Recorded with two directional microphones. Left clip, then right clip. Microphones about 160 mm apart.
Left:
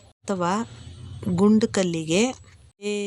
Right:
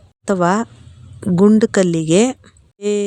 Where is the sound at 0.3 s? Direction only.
40° right (ahead or behind).